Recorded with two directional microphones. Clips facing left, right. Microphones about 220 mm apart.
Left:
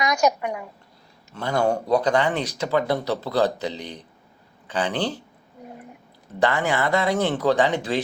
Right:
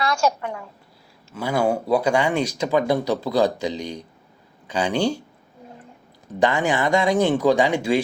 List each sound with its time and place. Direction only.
0.0 s a woman's voice: 20° left (ahead or behind)
1.3 s speech: 5° right (ahead or behind)
6.4 s speech: 15° right (ahead or behind)